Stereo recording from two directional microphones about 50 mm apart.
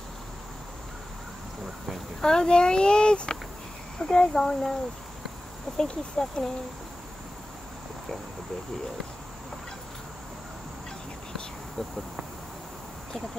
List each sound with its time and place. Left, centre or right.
2.2 s speech: centre
5.8 s speech: centre